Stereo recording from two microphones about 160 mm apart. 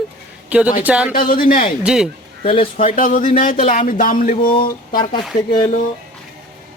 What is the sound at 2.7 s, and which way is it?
Speech, 55° left (ahead or behind).